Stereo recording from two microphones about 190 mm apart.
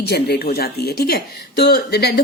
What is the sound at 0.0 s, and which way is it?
Speech, 55° left (ahead or behind).